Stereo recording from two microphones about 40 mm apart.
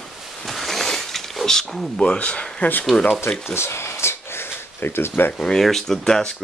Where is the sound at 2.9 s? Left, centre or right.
Left.